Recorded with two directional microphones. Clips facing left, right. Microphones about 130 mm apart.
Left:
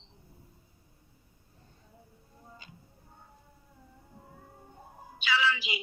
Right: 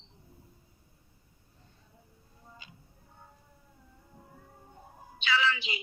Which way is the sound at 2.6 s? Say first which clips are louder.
Left 2 dB; 50° left (ahead or behind).